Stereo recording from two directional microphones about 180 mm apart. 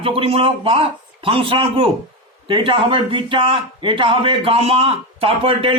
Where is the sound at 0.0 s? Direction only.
30° right (ahead or behind).